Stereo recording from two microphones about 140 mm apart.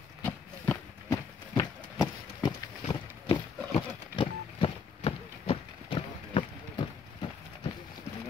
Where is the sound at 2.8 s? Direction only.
45° left (ahead or behind).